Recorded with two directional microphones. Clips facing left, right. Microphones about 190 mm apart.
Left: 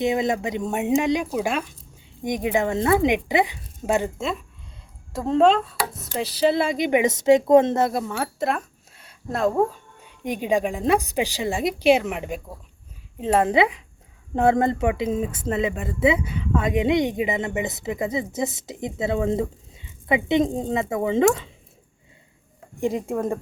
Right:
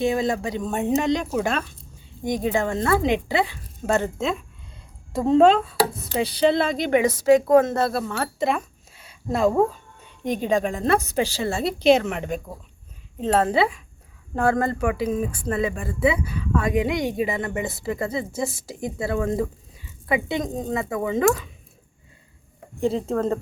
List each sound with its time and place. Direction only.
0.0 s a woman's voice: 20° left (ahead or behind); by 9.6 s centre (ahead or behind)
10.2 s a woman's voice: 10° left (ahead or behind)
22.8 s a woman's voice: 15° left (ahead or behind)